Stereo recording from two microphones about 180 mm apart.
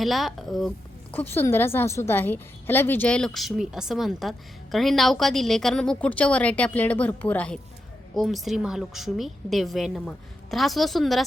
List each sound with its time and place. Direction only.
0.0 s a woman's voice: centre (ahead or behind)
1.1 s a woman's voice: 10° left (ahead or behind)